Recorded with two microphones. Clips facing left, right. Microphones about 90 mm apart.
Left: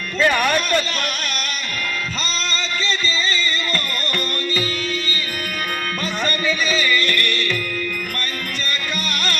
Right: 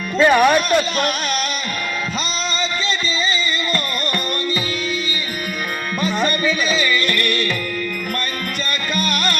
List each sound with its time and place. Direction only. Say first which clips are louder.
0.2 s speech: right 5 dB; 15° right (ahead or behind)
6.0 s music: right 6 dB; 15° right (ahead or behind)
9.0 s music: right 4 dB; 15° right (ahead or behind)